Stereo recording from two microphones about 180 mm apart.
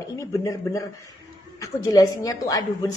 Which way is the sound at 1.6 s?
20° left (ahead or behind).